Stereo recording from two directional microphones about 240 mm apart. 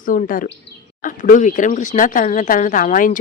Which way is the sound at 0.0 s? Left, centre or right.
Left.